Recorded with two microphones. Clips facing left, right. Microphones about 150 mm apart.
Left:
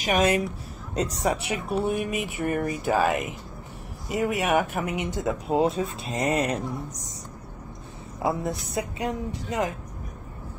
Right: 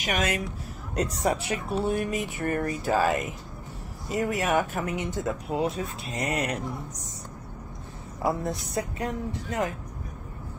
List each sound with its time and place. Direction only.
0.1 s speech: 35° left (ahead or behind)
1.3 s speech: 15° left (ahead or behind)
8.3 s speech: 10° left (ahead or behind)